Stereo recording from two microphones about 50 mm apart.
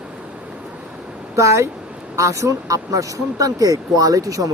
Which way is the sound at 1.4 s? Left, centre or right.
Right.